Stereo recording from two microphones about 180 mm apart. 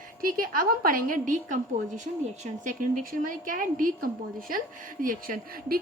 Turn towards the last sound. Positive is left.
turn(degrees=-50)  # may be behind; listen again after turning